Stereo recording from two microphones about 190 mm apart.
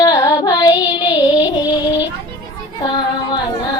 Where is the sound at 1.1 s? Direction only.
20° left (ahead or behind).